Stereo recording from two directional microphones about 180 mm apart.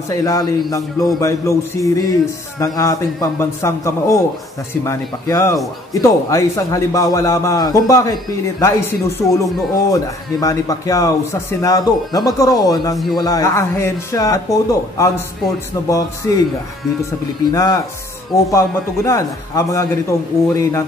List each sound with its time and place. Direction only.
0.1 s a man's voice: 20° left (ahead or behind)
17.5 s a man's voice: 20° left (ahead or behind)